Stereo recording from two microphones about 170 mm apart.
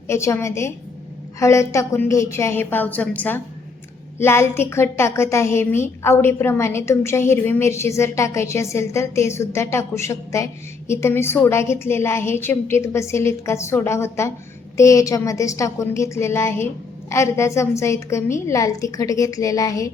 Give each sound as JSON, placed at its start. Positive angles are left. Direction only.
{"t": 0.1, "sound": "a woman's voice", "side_deg": 15}